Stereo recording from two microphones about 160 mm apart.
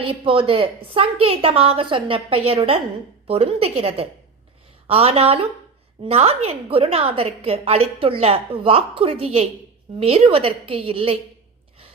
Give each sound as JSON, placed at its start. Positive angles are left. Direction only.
{"t": 0.1, "sound": "a woman's voice", "side_deg": -35}